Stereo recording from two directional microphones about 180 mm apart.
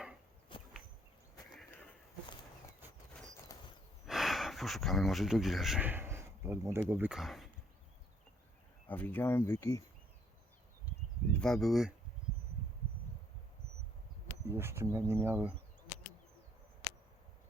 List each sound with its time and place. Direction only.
0.5 s a sound: 30° left (ahead or behind)
2.8 s horse: 10° right (ahead or behind)
3.5 s a sound: 15° left (ahead or behind)
4.0 s speech: centre (ahead or behind)
8.9 s speech: 10° left (ahead or behind)
11.3 s speech: centre (ahead or behind)
14.4 s speech: 15° right (ahead or behind)